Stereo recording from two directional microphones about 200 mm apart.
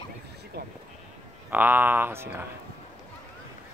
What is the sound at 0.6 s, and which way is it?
Speech, 55° right (ahead or behind).